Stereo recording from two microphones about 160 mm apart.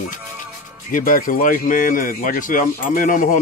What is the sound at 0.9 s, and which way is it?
Speech, 60° left (ahead or behind).